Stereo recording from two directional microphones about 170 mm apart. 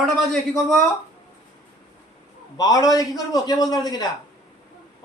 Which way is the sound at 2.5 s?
20° left (ahead or behind).